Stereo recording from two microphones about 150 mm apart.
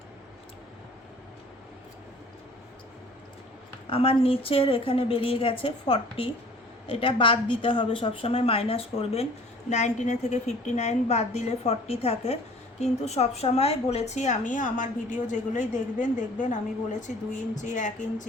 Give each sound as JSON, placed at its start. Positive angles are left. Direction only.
{"t": 3.8, "sound": "a woman's voice", "side_deg": 40}
{"t": 9.6, "sound": "a woman's voice", "side_deg": 50}